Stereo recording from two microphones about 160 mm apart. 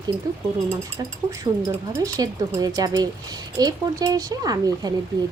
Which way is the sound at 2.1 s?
20° right (ahead or behind).